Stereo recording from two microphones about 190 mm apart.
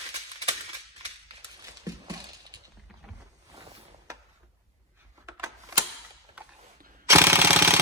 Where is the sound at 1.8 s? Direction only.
20° right (ahead or behind).